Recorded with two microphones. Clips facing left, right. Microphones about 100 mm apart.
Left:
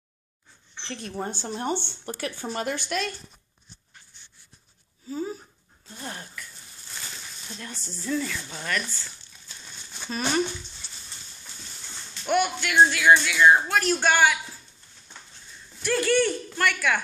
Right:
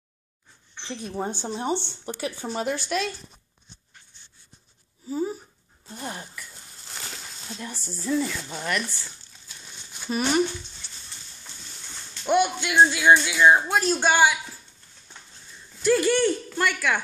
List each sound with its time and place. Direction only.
0.8 s speech: 10° right (ahead or behind)
2.0 s speech: 15° right (ahead or behind)
2.4 s speech: centre (ahead or behind)
5.0 s a sound: 20° right (ahead or behind)
7.5 s speech: 5° right (ahead or behind)
8.4 s speech: 20° right (ahead or behind)
10.0 s speech: 10° right (ahead or behind)
12.3 s speech: 20° right (ahead or behind)
15.8 s speech: 15° right (ahead or behind)